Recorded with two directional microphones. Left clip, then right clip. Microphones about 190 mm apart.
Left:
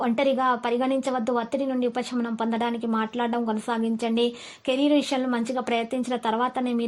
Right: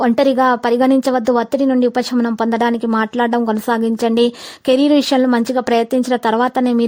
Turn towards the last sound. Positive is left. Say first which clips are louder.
# right 10 dB
turn(degrees=-45)  # may be behind; listen again after turning